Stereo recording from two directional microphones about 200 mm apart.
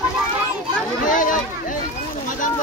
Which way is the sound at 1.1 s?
40° left (ahead or behind).